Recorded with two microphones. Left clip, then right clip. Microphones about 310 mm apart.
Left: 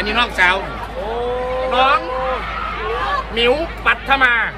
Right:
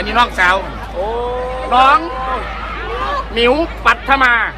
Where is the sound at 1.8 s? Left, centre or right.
Right.